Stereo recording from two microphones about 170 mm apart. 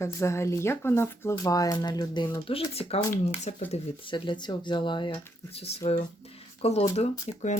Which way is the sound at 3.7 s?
30° left (ahead or behind).